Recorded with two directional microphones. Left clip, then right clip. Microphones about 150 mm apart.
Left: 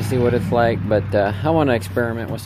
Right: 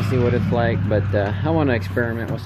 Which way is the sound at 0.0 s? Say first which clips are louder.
Left 2 dB; 35° left (ahead or behind).